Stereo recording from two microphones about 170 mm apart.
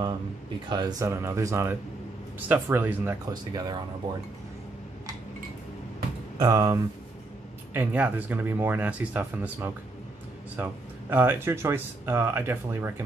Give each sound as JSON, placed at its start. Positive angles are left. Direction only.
{"t": 0.7, "sound": "speech", "side_deg": -25}
{"t": 3.5, "sound": "speech", "side_deg": -25}
{"t": 6.3, "sound": "speech", "side_deg": -25}
{"t": 7.7, "sound": "speech", "side_deg": -10}